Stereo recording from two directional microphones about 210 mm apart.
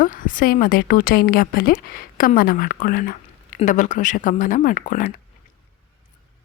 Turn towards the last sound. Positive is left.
turn(degrees=35)  # may be behind; listen again after turning